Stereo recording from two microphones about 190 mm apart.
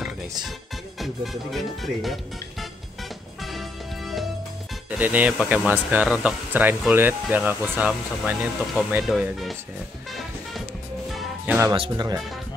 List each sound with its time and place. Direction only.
0.9 s speech: centre (ahead or behind)
3.5 s music: centre (ahead or behind)
4.9 s speech: 10° right (ahead or behind)
11.1 s music: centre (ahead or behind)
11.7 s speech: 25° right (ahead or behind)